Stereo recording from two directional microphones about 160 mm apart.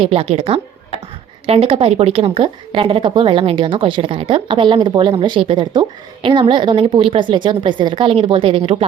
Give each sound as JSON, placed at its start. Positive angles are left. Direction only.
{"t": 0.0, "sound": "speech", "side_deg": -40}